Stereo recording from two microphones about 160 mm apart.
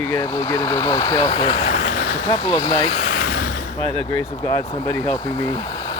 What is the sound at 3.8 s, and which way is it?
Speech, 35° right (ahead or behind).